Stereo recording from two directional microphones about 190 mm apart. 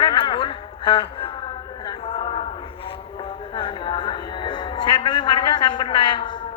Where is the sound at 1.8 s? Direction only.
30° left (ahead or behind).